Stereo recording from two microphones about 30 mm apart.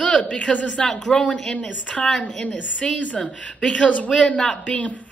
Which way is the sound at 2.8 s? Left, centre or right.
Left.